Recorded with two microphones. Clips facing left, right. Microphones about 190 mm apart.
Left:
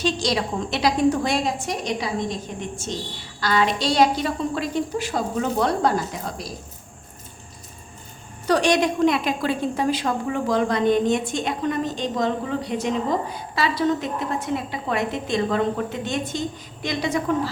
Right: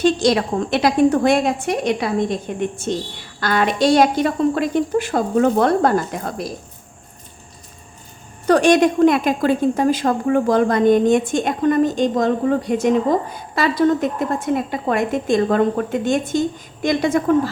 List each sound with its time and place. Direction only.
0.0 s a woman's voice: 55° right (ahead or behind)
8.4 s a woman's voice: 50° right (ahead or behind)